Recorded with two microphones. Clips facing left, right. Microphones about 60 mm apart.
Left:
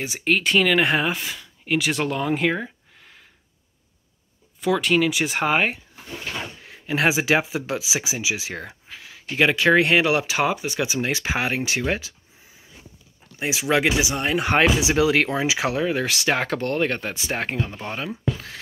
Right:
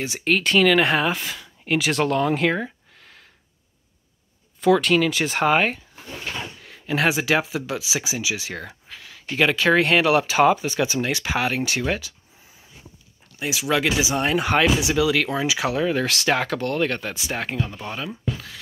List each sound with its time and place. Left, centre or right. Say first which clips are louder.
0.0 s speech: right 1 dB; left
0.3 s speech: right 1 dB; centre
4.6 s speech: right 3 dB; centre
6.3 s drawer open or close: left 1 dB; centre
7.8 s speech: even; centre
11.0 s speech: right 1 dB; centre
13.5 s speech: left 1 dB; centre
14.0 s speech: right 2 dB; centre
15.0 s speech: left 3 dB; left
15.2 s speech: even; centre; by 18.6 s left